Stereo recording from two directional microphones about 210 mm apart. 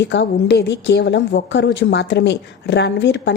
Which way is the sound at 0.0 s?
55° left (ahead or behind).